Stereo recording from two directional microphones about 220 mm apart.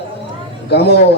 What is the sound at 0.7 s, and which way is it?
Speech, 50° left (ahead or behind).